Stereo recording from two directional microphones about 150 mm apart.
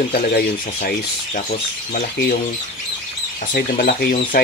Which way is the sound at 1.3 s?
65° left (ahead or behind).